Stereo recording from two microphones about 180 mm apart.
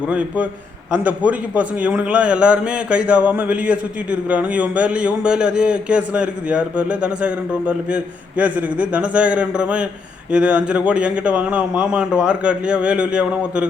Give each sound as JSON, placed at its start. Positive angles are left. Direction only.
{"t": 0.1, "sound": "a man's voice", "side_deg": -5}